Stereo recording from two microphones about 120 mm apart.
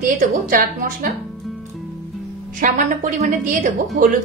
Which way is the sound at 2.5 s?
90° right.